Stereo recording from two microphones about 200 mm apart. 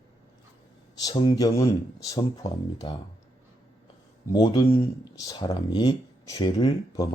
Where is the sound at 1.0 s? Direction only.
20° left (ahead or behind).